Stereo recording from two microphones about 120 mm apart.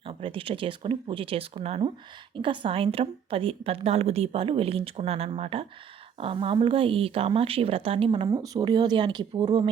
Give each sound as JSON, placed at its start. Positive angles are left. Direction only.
{"t": 0.0, "sound": "a woman's voice", "side_deg": -50}
{"t": 8.3, "sound": "speech", "side_deg": -35}